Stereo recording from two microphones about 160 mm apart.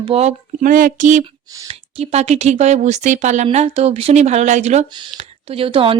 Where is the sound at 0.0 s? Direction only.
40° right (ahead or behind).